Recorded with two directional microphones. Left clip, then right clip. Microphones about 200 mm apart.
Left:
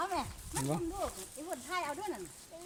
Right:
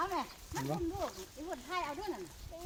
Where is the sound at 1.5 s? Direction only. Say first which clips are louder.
Left 1 dB; 60° left (ahead or behind).